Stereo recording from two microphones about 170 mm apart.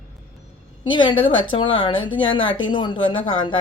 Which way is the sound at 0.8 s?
30° left (ahead or behind).